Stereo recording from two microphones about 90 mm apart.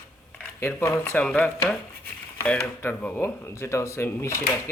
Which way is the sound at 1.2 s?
15° left (ahead or behind).